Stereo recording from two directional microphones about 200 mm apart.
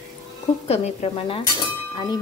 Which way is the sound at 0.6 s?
30° left (ahead or behind).